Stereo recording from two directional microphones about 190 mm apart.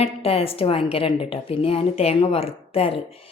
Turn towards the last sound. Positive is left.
turn(degrees=30)  # may be behind; listen again after turning